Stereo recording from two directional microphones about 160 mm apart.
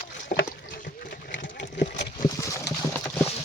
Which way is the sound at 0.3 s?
75° left (ahead or behind).